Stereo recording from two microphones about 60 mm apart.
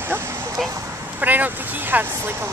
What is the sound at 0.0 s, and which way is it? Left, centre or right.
Vehicle, right.